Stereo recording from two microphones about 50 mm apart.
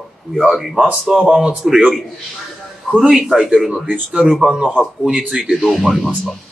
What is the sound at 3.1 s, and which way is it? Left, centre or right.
Speech, centre.